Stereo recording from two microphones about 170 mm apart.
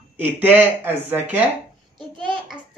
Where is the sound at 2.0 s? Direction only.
25° right (ahead or behind).